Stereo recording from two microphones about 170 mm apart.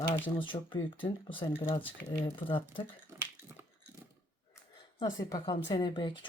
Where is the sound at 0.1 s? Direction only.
30° left (ahead or behind).